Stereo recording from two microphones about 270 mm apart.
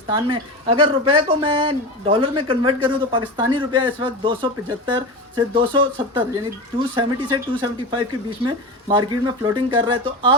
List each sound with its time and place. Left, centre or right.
0.1 s speech: centre
5.5 s speech: centre